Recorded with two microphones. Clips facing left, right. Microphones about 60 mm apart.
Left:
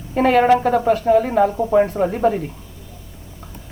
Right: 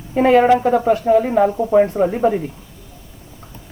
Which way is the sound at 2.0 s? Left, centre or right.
Centre.